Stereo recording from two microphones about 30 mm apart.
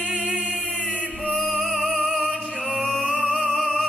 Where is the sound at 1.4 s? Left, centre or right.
Centre.